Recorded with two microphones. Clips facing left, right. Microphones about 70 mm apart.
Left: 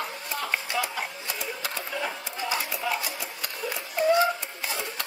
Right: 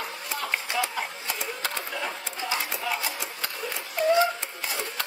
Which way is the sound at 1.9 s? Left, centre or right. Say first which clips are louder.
Left 1 dB; left.